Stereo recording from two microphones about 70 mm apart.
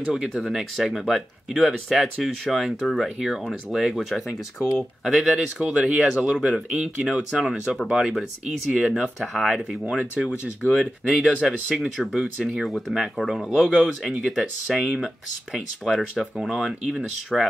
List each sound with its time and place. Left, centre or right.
0.1 s speech: centre
4.6 s speech: left
5.0 s speech: centre
7.9 s speech: centre
11.1 s speech: centre